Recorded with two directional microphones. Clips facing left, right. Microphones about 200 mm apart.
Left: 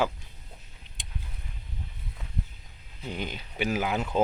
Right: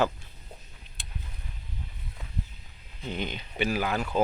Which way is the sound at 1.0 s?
15° left (ahead or behind).